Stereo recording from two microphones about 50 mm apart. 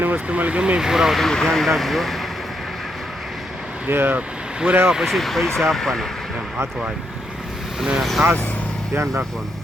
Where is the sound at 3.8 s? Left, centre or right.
Right.